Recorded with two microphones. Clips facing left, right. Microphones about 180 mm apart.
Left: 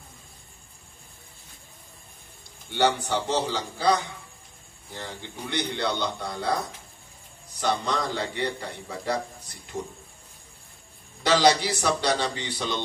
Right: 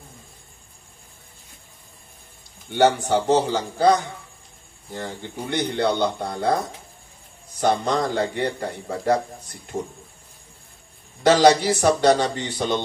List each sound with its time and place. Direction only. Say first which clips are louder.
2.7 s a man's voice: right 6 dB; 50° right (ahead or behind)
7.6 s a man's voice: right 6 dB; 50° right (ahead or behind)
11.2 s a man's voice: right 6 dB; 45° right (ahead or behind)